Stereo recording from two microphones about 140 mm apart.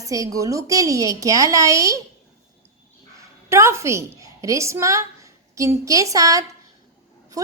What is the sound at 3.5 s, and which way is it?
A woman's voice, 20° right (ahead or behind).